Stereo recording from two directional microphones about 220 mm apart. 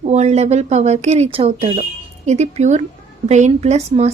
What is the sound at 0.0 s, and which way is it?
A woman's voice, 30° right (ahead or behind).